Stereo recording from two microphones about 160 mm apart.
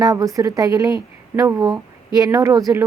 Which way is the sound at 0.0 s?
25° right (ahead or behind).